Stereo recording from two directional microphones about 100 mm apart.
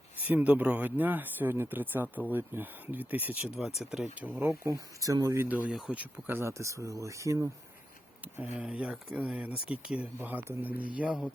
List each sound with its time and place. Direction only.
0.2 s speech: 15° right (ahead or behind)
3.4 s speech: 5° right (ahead or behind); by 5.5 s 30° right (ahead or behind)
5.5 s speech: 15° right (ahead or behind)
8.4 s speech: 15° right (ahead or behind)
10.2 s speech: 20° right (ahead or behind)